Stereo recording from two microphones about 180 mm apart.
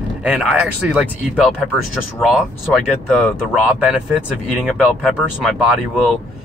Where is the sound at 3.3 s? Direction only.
5° right (ahead or behind).